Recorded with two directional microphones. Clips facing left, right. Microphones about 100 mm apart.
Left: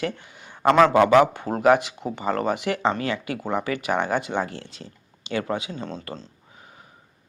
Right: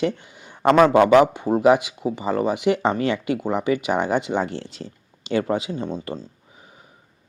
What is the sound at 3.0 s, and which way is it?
A man's voice, 25° right (ahead or behind).